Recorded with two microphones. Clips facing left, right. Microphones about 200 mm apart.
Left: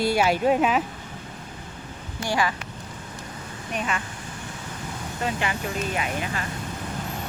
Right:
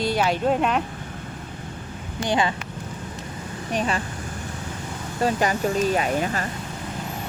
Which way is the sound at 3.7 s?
35° right (ahead or behind).